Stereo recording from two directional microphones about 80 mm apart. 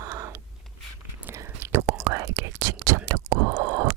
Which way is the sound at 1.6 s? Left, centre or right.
Right.